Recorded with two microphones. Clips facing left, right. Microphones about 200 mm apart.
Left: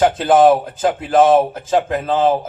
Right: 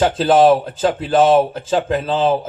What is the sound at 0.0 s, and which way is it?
Speech, 30° right (ahead or behind).